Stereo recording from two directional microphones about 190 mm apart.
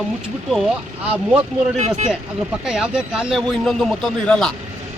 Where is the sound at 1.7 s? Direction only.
35° right (ahead or behind).